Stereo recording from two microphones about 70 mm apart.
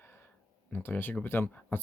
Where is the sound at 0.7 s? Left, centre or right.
Left.